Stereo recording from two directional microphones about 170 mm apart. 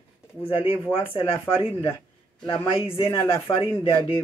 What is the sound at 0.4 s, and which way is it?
Speech, 35° left (ahead or behind).